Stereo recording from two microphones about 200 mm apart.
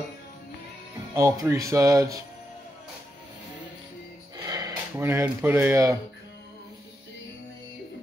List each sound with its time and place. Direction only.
1.1 s speech: 15° right (ahead or behind)
4.4 s speech: 15° right (ahead or behind)